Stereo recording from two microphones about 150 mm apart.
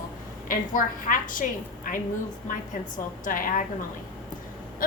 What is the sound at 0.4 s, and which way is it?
A woman's voice, 65° left (ahead or behind).